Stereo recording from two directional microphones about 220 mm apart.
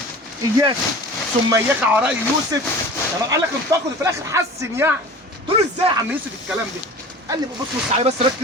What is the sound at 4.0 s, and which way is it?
Speech, 15° right (ahead or behind).